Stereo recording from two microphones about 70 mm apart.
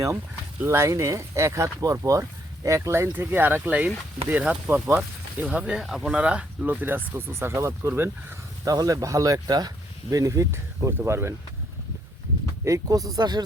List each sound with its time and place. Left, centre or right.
0.6 s speech: right
3.1 s speech: right; by 5.8 s centre
5.8 s speech: centre
6.1 s speech: centre; by 8.1 s right
8.6 s speech: right
12.6 s speech: right